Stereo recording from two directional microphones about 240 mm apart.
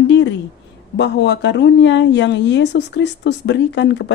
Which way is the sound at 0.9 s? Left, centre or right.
Left.